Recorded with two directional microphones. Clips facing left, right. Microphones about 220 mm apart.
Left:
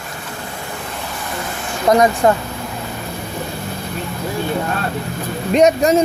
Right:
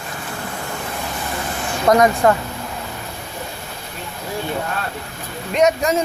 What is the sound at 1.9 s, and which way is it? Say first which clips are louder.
Speech: left 1 dB; 20° left (ahead or behind).